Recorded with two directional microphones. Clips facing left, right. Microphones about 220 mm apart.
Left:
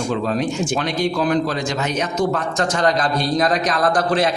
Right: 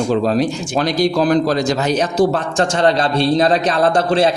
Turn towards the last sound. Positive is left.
turn(degrees=-30)  # may be behind; listen again after turning